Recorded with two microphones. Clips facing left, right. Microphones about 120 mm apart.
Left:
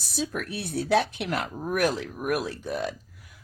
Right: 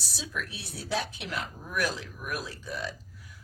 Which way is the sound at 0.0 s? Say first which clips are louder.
Left 7 dB; 55° left (ahead or behind).